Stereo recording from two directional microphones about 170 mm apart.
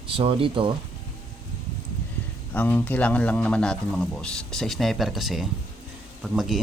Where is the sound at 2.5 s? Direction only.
10° left (ahead or behind).